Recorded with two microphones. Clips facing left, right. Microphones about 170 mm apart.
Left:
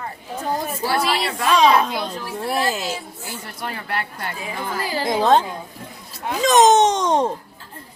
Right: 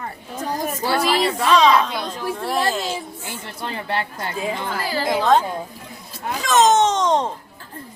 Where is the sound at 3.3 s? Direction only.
25° right (ahead or behind).